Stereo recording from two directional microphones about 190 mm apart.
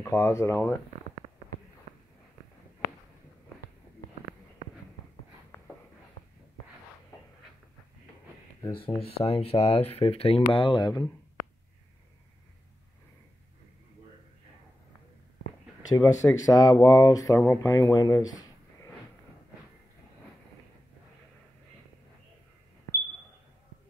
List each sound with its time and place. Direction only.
0.0 s speech: 15° left (ahead or behind)
8.7 s speech: 30° left (ahead or behind)
15.9 s speech: 20° left (ahead or behind)